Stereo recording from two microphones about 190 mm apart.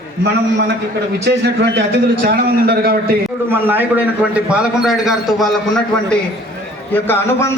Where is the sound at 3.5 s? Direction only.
10° right (ahead or behind).